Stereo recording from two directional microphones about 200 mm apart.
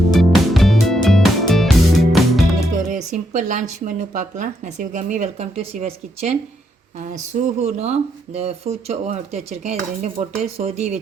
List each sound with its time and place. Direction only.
0.1 s music: centre (ahead or behind)
2.7 s speech: 40° right (ahead or behind)